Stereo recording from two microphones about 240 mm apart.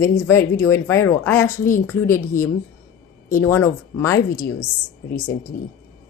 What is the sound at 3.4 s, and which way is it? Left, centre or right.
Speech, centre.